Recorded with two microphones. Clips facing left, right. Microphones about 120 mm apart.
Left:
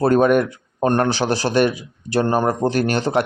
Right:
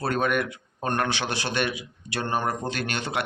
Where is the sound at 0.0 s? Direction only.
40° left (ahead or behind).